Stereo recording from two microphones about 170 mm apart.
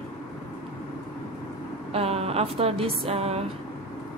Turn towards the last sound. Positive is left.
turn(degrees=-40)  # may be behind; listen again after turning